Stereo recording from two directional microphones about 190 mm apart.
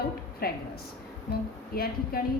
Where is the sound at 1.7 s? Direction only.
50° left (ahead or behind).